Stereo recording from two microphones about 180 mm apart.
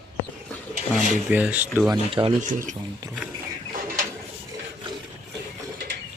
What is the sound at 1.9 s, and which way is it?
Speech, 30° right (ahead or behind).